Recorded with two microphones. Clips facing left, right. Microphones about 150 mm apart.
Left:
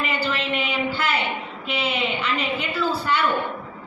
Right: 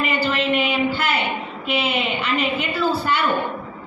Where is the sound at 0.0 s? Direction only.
55° right (ahead or behind).